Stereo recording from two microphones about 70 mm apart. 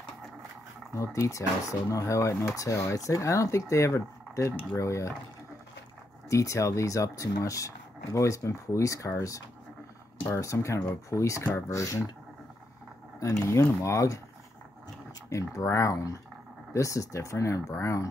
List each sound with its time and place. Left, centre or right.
0.9 s speech: left
6.3 s speech: left
13.2 s speech: left
15.2 s speech: left